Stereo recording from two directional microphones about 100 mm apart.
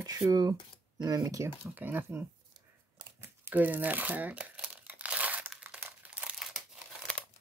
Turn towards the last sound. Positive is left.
turn(degrees=-5)  # may be behind; listen again after turning